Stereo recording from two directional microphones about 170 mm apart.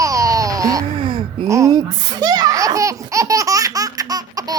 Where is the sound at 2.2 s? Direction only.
25° right (ahead or behind).